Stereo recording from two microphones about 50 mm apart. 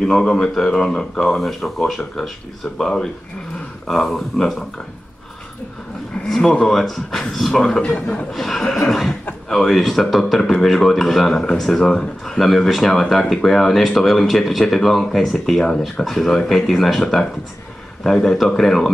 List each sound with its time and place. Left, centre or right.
0.0 s speech: centre
6.2 s speech: centre
7.8 s a man's voice: centre
8.3 s speech: centre
18.0 s speech: centre